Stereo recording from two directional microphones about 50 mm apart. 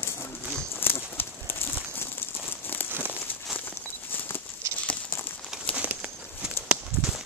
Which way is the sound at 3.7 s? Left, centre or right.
Left.